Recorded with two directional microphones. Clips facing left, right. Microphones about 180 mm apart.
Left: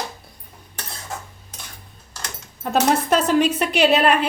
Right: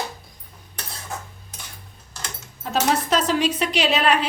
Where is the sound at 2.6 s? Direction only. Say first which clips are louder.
Left 3 dB; 55° left (ahead or behind).